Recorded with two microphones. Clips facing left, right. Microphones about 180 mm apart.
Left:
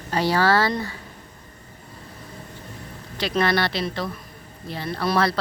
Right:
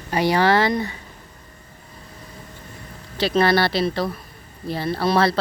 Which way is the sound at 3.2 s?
35° right (ahead or behind).